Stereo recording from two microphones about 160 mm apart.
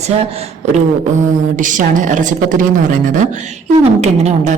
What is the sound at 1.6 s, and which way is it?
A woman's voice, 55° right (ahead or behind).